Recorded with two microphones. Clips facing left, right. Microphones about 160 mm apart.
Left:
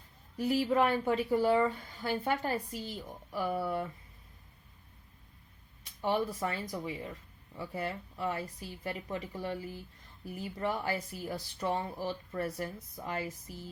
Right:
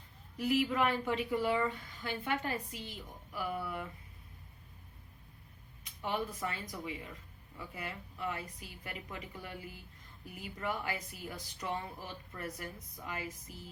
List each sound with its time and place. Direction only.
0.3 s a woman's voice: 35° left (ahead or behind)
5.8 s a woman's voice: 35° left (ahead or behind)